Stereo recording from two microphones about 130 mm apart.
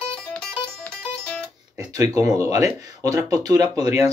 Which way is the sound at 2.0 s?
25° right (ahead or behind).